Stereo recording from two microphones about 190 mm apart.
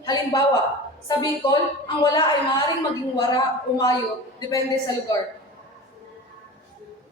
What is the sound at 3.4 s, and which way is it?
Speech, 20° left (ahead or behind).